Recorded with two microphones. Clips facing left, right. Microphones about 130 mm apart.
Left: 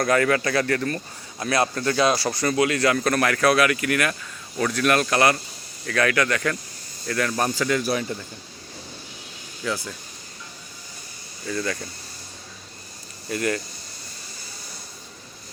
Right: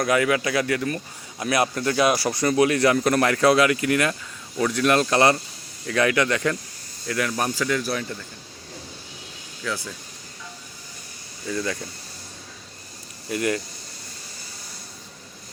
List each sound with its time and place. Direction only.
0.0 s speech: 10° right (ahead or behind)
7.1 s speech: 10° right (ahead or behind)
9.6 s speech: 10° left (ahead or behind)
11.4 s speech: 20° right (ahead or behind)
13.2 s speech: 20° right (ahead or behind)